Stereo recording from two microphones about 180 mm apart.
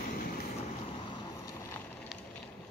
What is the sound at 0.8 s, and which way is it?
Boat, 25° left (ahead or behind).